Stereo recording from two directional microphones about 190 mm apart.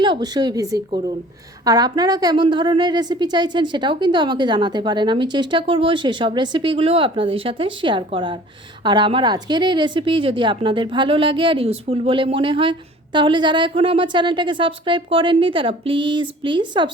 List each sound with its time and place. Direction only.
0.0 s a woman's voice: 25° right (ahead or behind)